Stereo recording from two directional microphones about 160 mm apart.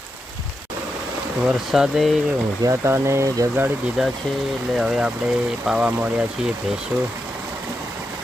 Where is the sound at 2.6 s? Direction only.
20° right (ahead or behind).